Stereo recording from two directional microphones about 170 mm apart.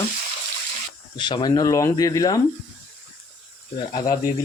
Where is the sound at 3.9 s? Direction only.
25° left (ahead or behind).